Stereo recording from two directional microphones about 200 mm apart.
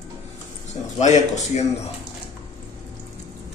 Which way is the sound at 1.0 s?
35° left (ahead or behind).